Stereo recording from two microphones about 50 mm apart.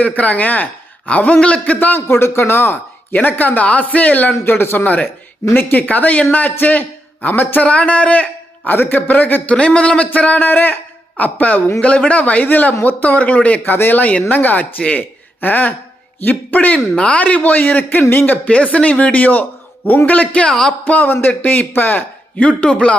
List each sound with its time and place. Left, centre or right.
0.0 s speech: left
2.0 s speech: left
3.2 s speech: left
4.4 s a man's voice: left
7.7 s speech: left
9.6 s speech: left
20.4 s speech: centre
20.8 s speech: left